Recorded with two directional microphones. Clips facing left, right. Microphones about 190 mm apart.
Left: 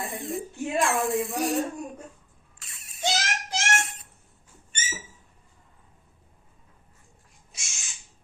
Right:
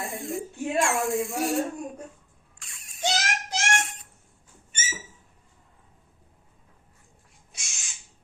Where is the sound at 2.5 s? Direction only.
5° left (ahead or behind).